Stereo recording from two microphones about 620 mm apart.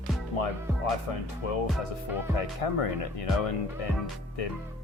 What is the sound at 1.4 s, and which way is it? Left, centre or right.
Speech, left.